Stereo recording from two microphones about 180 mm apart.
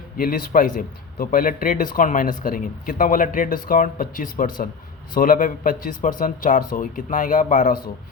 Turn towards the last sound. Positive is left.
turn(degrees=45)  # may be behind; listen again after turning